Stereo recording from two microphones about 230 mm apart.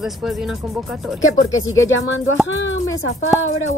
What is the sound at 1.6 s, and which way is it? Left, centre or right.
Speech, left.